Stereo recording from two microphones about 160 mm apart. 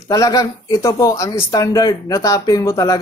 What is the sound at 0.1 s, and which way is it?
Speech, 20° left (ahead or behind).